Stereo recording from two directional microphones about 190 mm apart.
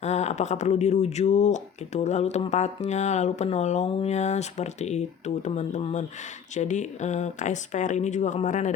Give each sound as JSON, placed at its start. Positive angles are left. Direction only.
{"t": 0.0, "sound": "speech", "side_deg": 35}